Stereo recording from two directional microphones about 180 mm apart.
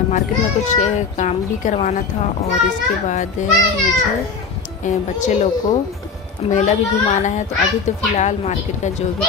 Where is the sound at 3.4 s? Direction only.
40° left (ahead or behind).